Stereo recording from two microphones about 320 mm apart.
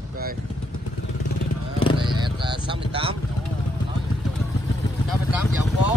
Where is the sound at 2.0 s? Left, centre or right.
Centre.